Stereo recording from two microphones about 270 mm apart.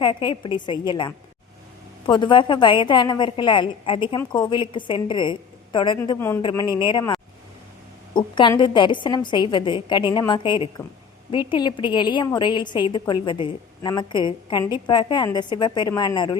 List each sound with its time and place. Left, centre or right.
0.0 s a woman's voice: centre